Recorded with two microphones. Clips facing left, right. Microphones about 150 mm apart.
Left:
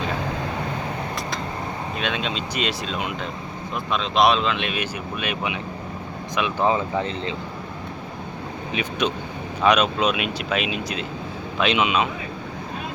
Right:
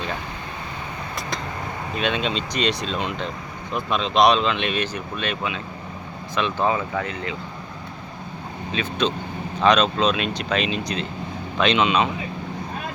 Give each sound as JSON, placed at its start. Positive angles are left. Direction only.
{"t": 2.0, "sound": "speech", "side_deg": 0}
{"t": 8.7, "sound": "speech", "side_deg": 15}